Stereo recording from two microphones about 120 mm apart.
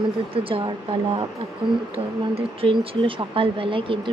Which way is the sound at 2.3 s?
50° right (ahead or behind).